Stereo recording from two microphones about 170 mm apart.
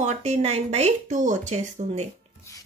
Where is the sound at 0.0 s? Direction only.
40° right (ahead or behind).